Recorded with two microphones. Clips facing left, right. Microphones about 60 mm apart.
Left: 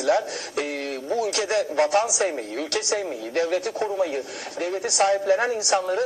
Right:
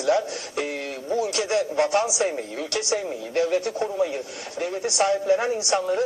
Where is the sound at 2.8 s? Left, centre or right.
Left.